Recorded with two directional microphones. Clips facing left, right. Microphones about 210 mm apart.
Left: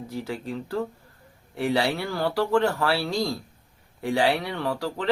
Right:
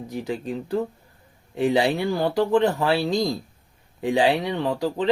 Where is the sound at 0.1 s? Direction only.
20° right (ahead or behind).